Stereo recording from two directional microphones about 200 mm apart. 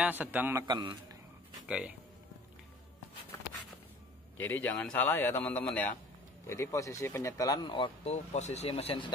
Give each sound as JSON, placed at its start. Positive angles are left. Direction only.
{"t": 0.0, "sound": "a man's voice", "side_deg": -10}
{"t": 1.7, "sound": "speech", "side_deg": -5}
{"t": 4.4, "sound": "speech", "side_deg": 10}